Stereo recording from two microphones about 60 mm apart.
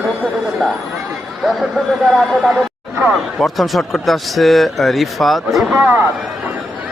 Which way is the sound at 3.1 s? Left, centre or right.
Centre.